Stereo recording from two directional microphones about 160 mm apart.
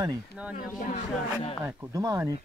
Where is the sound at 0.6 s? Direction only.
50° left (ahead or behind).